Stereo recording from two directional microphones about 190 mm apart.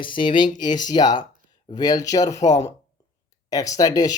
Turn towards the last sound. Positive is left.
turn(degrees=20)  # may be behind; listen again after turning